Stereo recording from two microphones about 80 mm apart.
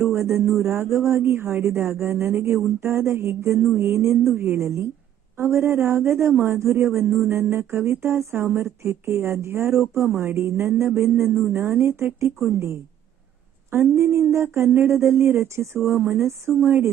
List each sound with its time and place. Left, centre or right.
0.1 s speech: right
16.0 s speech: right